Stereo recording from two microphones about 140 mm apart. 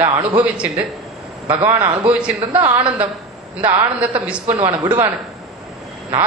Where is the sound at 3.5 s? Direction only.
35° right (ahead or behind).